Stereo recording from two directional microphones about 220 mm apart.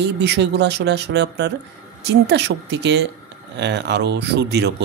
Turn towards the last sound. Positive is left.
turn(degrees=-50)  # may be behind; listen again after turning